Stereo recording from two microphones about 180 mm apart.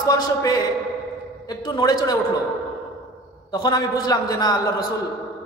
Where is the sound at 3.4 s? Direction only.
20° left (ahead or behind).